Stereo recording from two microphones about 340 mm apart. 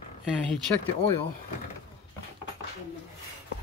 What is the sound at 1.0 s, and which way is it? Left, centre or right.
Speech, centre.